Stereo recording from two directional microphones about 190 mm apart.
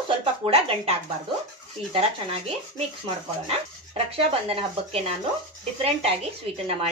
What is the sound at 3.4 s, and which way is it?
Speech, 30° right (ahead or behind).